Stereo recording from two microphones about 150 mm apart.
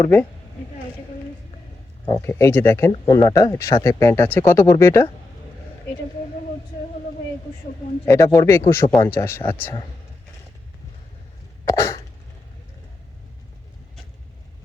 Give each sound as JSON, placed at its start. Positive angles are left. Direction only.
{"t": 0.0, "sound": "speech", "side_deg": 15}
{"t": 2.2, "sound": "speech", "side_deg": 15}
{"t": 8.0, "sound": "speech", "side_deg": 20}
{"t": 11.6, "sound": "cough", "side_deg": 20}